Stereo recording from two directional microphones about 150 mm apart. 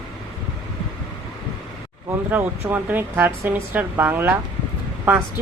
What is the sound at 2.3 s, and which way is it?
Speech, 10° right (ahead or behind).